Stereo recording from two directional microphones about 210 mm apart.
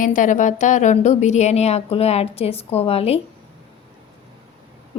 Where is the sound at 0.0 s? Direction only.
40° left (ahead or behind).